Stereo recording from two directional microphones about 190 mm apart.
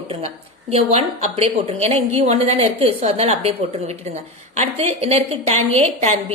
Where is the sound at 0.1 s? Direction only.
30° right (ahead or behind).